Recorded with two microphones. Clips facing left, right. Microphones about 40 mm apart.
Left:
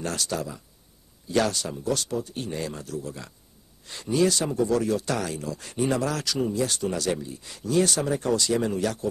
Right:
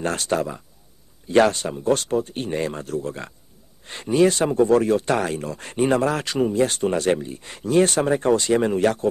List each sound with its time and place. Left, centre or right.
0.0 s speech: right